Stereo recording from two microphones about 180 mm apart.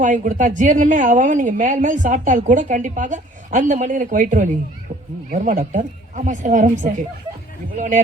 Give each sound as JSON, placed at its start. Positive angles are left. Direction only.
{"t": 0.0, "sound": "a woman's voice", "side_deg": -45}